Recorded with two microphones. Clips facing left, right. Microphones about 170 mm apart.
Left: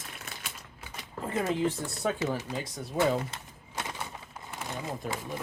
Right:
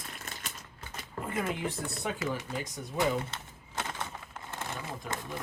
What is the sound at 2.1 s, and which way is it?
Speech, 25° left (ahead or behind).